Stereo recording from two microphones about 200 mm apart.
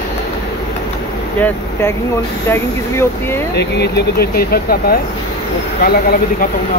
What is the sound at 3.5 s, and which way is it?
Speech, 55° left (ahead or behind).